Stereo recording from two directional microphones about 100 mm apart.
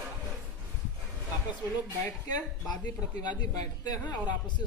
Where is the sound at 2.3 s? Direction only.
40° left (ahead or behind).